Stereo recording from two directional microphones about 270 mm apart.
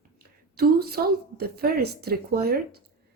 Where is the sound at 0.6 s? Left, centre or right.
Right.